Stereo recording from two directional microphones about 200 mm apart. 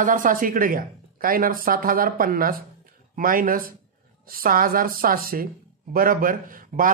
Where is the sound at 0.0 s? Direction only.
40° right (ahead or behind).